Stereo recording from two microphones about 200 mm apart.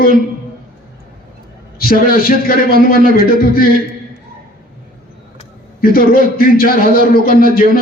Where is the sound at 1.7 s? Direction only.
45° left (ahead or behind).